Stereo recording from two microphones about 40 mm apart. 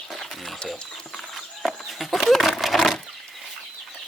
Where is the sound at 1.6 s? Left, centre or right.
Centre.